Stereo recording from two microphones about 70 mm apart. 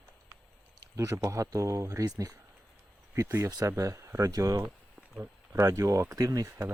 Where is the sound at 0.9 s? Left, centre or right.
Right.